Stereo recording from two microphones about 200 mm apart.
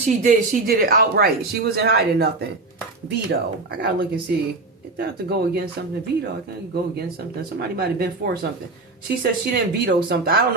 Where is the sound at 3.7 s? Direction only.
50° right (ahead or behind).